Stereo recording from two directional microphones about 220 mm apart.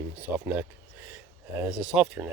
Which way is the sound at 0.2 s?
5° right (ahead or behind).